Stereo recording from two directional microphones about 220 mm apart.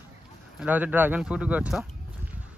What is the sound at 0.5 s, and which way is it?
Speech, 5° right (ahead or behind).